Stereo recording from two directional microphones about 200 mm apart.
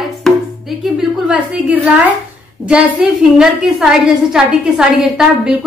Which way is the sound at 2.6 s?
5° right (ahead or behind).